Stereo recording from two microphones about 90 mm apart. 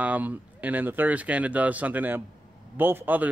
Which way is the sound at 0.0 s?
20° right (ahead or behind).